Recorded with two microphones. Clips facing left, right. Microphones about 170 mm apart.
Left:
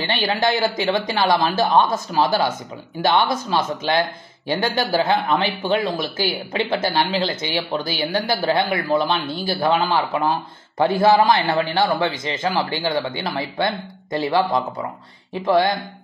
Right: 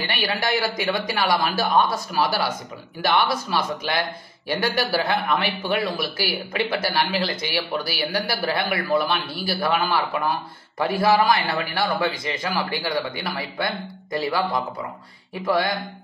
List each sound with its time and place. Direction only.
0.2 s a man's voice: 25° left (ahead or behind)